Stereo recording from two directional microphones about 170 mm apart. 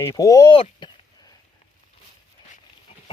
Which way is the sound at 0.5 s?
30° left (ahead or behind).